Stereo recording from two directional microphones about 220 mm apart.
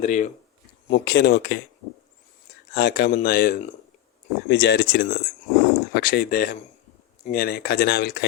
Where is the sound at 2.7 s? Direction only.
50° left (ahead or behind).